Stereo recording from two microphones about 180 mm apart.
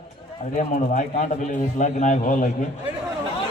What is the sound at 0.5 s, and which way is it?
A man's voice, 45° left (ahead or behind).